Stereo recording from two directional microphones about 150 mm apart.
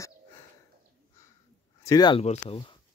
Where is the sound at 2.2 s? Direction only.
45° left (ahead or behind).